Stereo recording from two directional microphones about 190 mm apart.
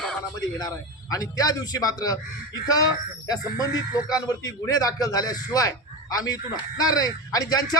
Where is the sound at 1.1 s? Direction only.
20° left (ahead or behind).